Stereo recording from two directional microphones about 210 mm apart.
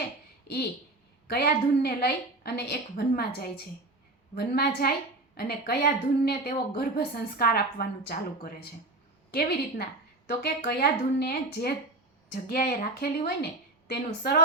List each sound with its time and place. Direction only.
0.5 s a woman's voice: 50° left (ahead or behind)
9.3 s a woman's voice: 50° left (ahead or behind)